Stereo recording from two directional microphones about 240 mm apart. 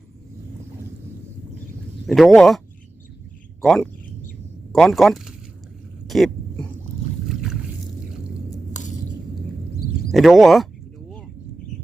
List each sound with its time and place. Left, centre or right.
2.0 s speech: centre
3.6 s speech: centre
6.1 s a sound: centre
7.3 s boat: centre
8.7 s a sound: left
10.1 s speech: centre